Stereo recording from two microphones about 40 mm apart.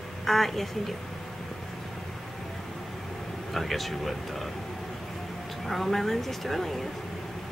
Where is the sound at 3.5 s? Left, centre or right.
Centre.